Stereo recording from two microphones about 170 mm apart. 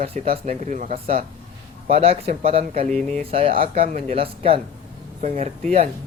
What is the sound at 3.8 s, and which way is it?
Speech, 45° right (ahead or behind).